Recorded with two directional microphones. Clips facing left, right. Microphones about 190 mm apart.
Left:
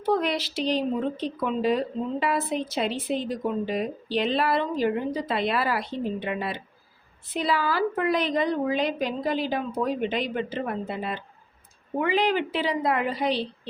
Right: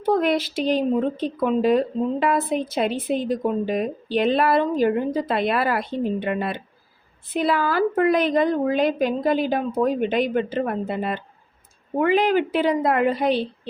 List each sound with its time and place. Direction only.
0.0 s speech: 50° right (ahead or behind)